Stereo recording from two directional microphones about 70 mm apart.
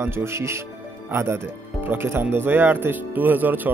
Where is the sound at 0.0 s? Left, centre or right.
Right.